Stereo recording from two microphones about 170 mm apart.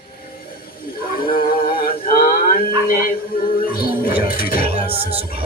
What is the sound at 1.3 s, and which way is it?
Male singing, 60° left (ahead or behind).